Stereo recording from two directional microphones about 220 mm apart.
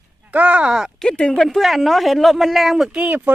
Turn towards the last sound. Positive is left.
turn(degrees=-5)  # may be behind; listen again after turning